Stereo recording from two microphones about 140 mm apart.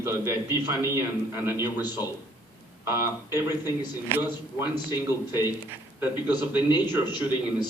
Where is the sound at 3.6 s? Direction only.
30° left (ahead or behind).